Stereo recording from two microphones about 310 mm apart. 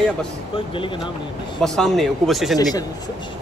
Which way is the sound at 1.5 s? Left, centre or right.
Centre.